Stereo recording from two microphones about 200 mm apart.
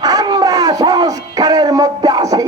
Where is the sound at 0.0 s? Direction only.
20° right (ahead or behind).